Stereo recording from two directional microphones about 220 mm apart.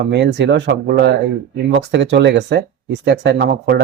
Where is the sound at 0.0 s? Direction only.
50° right (ahead or behind).